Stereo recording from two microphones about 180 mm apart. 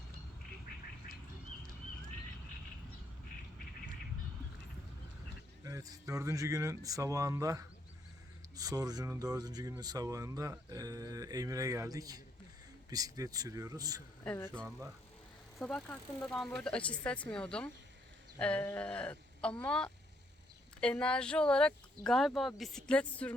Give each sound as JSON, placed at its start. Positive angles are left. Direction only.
{"t": 5.6, "sound": "speech", "side_deg": -20}
{"t": 14.3, "sound": "speech", "side_deg": 10}